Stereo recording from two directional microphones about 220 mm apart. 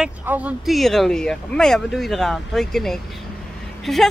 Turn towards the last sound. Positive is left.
turn(degrees=0)  # may be behind; listen again after turning